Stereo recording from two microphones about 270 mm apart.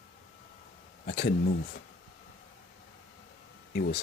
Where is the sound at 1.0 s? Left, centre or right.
Left.